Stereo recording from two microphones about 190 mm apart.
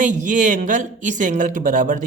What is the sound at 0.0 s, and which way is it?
Speech, 40° right (ahead or behind).